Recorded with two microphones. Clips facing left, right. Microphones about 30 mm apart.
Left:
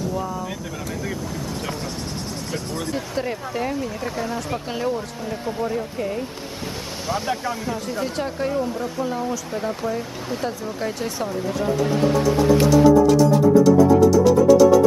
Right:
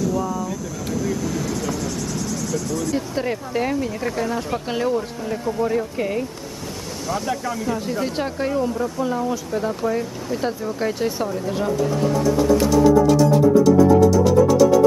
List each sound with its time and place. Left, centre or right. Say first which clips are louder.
0.0 s vehicle: right 3 dB; left
1.2 s vehicle: right 5 dB; right
1.5 s vehicle: right 4 dB; left
3.2 s speech: even; centre
5.9 s speech: right 3 dB; right
7.1 s speech: even; left
7.8 s speech: right 2 dB; centre
9.5 s speech: right 3 dB; centre
10.4 s speech: right 4 dB; centre
12.0 s speech: left 1 dB; left
12.6 s music: left 2 dB; centre